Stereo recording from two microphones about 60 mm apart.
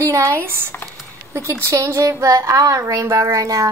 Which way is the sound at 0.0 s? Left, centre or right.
Right.